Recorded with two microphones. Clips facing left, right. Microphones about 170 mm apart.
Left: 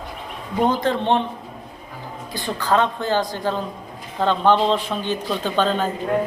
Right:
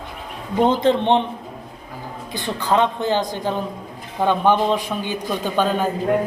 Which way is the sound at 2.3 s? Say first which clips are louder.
Even; 20° right (ahead or behind).